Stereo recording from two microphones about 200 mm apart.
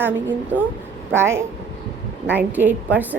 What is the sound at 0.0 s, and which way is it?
Speech, 10° right (ahead or behind).